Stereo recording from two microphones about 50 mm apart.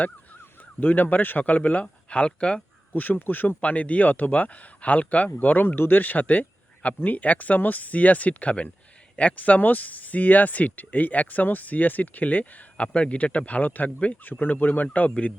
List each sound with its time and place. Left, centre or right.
0.8 s speech: left; by 2.6 s centre
2.9 s speech: left
3.6 s speech: left
5.6 s speech: left